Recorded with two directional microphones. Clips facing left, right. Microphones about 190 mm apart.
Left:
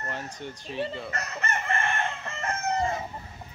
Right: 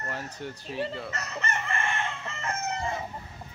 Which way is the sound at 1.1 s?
50° left (ahead or behind).